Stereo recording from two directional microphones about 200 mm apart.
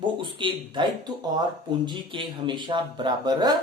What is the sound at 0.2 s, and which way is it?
A woman's voice, 25° right (ahead or behind).